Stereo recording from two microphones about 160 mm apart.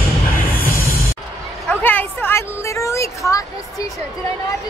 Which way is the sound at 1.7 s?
10° left (ahead or behind).